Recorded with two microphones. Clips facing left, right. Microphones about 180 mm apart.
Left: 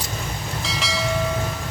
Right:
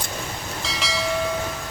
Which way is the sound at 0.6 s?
Centre (ahead or behind).